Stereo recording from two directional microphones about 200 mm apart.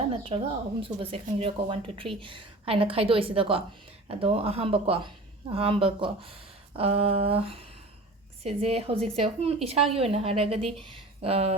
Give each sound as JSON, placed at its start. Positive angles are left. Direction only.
{"t": 0.3, "sound": "speech", "side_deg": -25}